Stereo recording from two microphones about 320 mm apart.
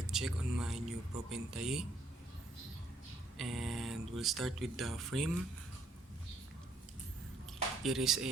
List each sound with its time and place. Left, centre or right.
0.1 s speech: centre
3.3 s speech: centre
7.9 s speech: centre